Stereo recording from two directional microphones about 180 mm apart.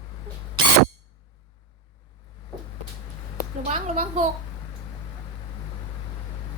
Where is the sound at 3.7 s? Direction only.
35° right (ahead or behind).